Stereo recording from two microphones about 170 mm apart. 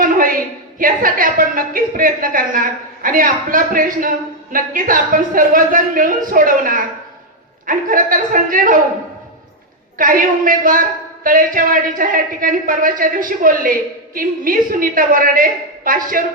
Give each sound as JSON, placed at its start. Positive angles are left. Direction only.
{"t": 0.0, "sound": "a sound", "side_deg": -55}
{"t": 0.8, "sound": "a woman's voice", "side_deg": -55}
{"t": 10.0, "sound": "a woman's voice", "side_deg": -55}